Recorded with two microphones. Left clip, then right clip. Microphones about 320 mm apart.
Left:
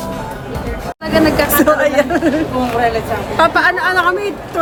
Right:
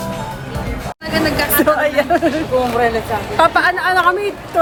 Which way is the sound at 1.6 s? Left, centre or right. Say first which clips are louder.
Left 1 dB; centre.